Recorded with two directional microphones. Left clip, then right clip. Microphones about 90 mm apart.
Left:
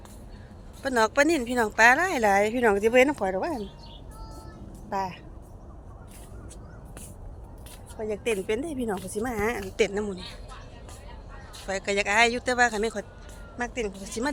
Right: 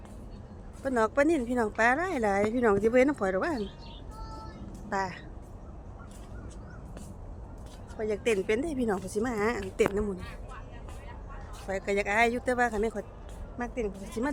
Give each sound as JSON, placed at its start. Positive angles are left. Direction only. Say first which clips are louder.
{"t": 0.8, "sound": "speech", "louder": "left 4 dB", "side_deg": -20}
{"t": 3.2, "sound": "speech", "louder": "left 1 dB", "side_deg": -25}
{"t": 4.9, "sound": "speech", "louder": "left 2 dB", "side_deg": -15}
{"t": 7.9, "sound": "speech", "louder": "even", "side_deg": -20}
{"t": 9.9, "sound": "speech", "louder": "left 1 dB", "side_deg": -30}
{"t": 11.7, "sound": "speech", "louder": "left 3 dB", "side_deg": -15}